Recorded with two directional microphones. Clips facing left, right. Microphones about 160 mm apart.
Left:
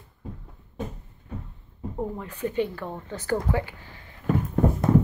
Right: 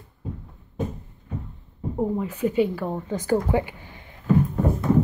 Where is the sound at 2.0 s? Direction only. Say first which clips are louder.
Right 7 dB; 15° right (ahead or behind).